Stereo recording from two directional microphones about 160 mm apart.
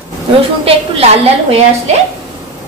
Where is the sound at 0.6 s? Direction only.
35° right (ahead or behind).